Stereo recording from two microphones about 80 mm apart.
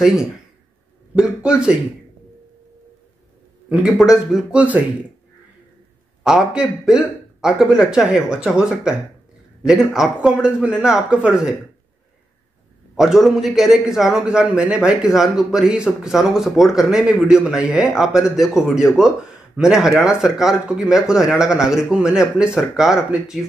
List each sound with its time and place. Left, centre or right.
0.0 s speech: centre
3.6 s speech: centre
4.6 s speech: centre
6.2 s speech: centre
9.9 s a man's voice: centre
12.9 s speech: centre